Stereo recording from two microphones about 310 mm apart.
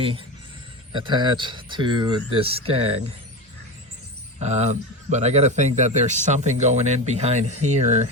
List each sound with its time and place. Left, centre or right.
0.9 s speech: centre
4.4 s a man's voice: right